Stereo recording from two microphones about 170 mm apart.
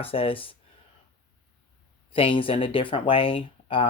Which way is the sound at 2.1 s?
30° left (ahead or behind).